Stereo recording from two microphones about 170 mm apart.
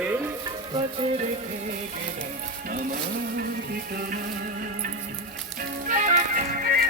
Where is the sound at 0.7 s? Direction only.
30° right (ahead or behind).